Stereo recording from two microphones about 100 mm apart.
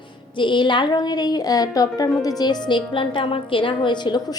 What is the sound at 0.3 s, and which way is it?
A woman's voice, 55° left (ahead or behind).